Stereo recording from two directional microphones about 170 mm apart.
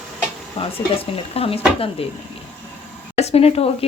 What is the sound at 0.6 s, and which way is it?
Speech, 30° left (ahead or behind).